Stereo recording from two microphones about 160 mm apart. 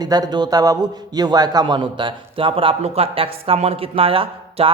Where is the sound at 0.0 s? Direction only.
25° right (ahead or behind).